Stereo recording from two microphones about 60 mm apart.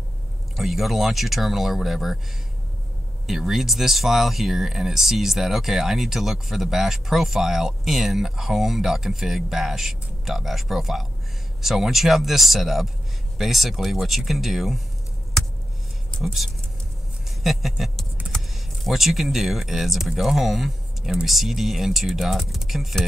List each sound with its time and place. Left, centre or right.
0.6 s speech: centre
3.3 s speech: centre
16.2 s speech: centre
17.4 s a sound: centre
18.9 s speech: centre